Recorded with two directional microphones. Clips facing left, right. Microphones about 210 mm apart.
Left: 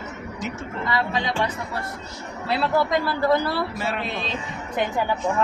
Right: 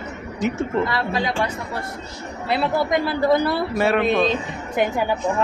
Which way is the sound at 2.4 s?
20° right (ahead or behind).